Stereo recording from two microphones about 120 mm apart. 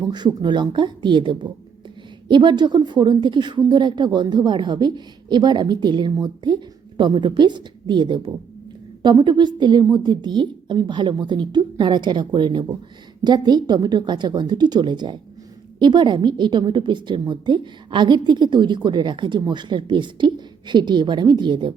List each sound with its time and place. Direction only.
0.0 s a woman's voice: 35° right (ahead or behind)